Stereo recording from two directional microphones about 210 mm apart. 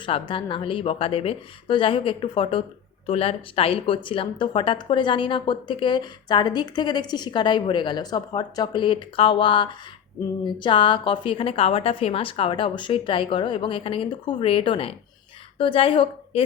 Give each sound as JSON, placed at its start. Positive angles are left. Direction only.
{"t": 0.0, "sound": "a woman's voice", "side_deg": 25}